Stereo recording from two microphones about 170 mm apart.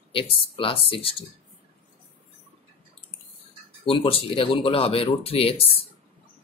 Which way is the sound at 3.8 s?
30° left (ahead or behind).